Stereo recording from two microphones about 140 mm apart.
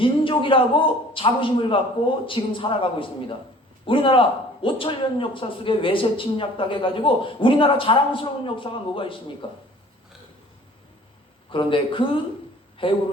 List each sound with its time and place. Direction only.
0.0 s a man's voice: 40° left (ahead or behind)
11.5 s a man's voice: 35° left (ahead or behind)